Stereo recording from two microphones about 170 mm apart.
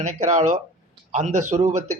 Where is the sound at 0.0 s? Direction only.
40° right (ahead or behind).